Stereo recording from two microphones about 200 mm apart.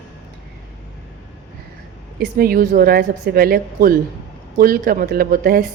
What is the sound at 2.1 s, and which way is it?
A woman's voice, 50° right (ahead or behind).